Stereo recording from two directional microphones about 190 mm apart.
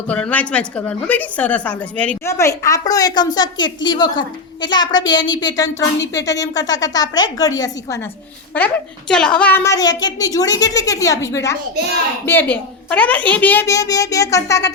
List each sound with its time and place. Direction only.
0.1 s a woman's voice: 10° left (ahead or behind)
8.5 s a woman's voice: 5° left (ahead or behind)